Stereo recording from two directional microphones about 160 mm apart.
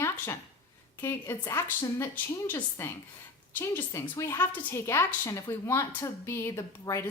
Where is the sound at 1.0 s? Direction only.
15° left (ahead or behind).